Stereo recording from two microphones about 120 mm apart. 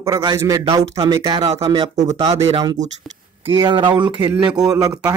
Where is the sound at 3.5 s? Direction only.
40° right (ahead or behind).